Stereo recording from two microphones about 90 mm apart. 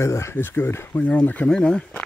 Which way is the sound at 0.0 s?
30° left (ahead or behind).